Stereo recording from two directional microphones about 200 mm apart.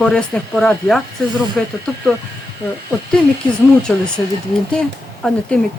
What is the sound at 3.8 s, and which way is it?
Speech, 5° left (ahead or behind).